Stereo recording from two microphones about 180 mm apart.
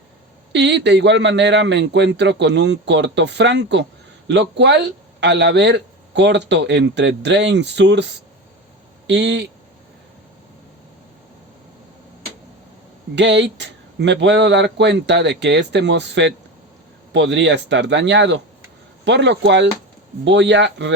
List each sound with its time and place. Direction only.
0.5 s a man's voice: 75° right (ahead or behind)
13.1 s a man's voice: 75° right (ahead or behind)